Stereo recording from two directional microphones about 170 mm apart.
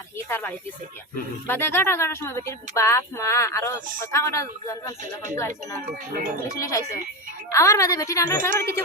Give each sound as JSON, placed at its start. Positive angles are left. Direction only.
{"t": 0.3, "sound": "a woman's voice", "side_deg": 15}
{"t": 6.6, "sound": "a woman's voice", "side_deg": 20}